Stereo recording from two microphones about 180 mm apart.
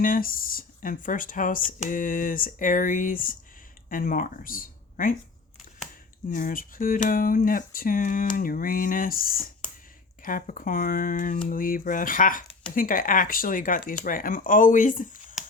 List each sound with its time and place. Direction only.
0.0 s speech: 50° left (ahead or behind)
6.2 s speech: 50° left (ahead or behind)